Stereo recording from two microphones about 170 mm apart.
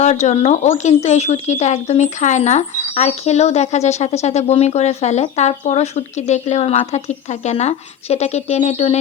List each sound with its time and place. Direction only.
0.0 s speech: 40° left (ahead or behind)